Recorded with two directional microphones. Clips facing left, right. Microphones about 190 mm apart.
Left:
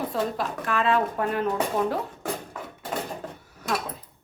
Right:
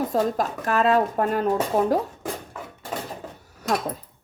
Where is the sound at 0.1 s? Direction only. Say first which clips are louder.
Right 4 dB; 40° right (ahead or behind).